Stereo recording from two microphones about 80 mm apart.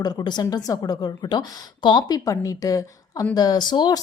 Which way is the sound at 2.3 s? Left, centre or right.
Left.